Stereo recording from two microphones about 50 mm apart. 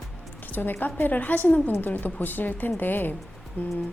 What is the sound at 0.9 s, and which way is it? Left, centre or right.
A woman's voice, left.